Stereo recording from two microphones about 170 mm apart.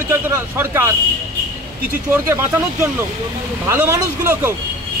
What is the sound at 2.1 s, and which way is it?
A man's voice, 15° right (ahead or behind).